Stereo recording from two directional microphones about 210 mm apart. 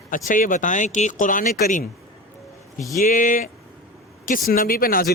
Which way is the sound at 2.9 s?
40° left (ahead or behind).